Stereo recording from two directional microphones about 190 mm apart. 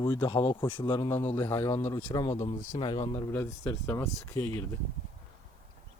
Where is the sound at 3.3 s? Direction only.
10° left (ahead or behind).